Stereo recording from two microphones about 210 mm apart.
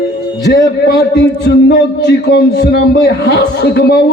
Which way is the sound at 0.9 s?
50° left (ahead or behind).